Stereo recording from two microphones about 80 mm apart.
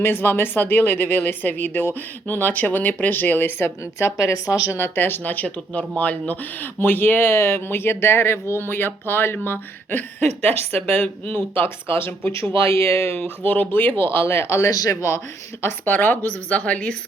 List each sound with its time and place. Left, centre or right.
0.0 s speech: left
13.2 s speech: left
14.7 s speech: left
15.6 s speech: left